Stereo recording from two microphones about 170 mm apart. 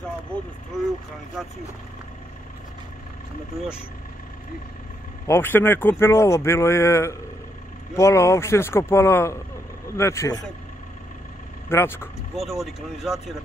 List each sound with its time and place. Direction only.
5.2 s speech: 15° left (ahead or behind)
11.7 s speech: 15° left (ahead or behind)
12.4 s speech: centre (ahead or behind)